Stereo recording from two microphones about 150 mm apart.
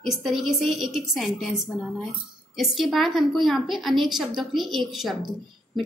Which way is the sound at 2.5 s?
Centre (ahead or behind).